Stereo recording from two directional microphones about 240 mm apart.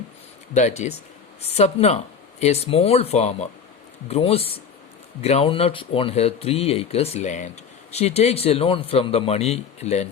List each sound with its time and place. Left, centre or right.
0.5 s speech: left